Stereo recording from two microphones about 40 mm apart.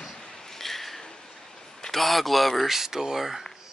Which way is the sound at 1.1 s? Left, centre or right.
Centre.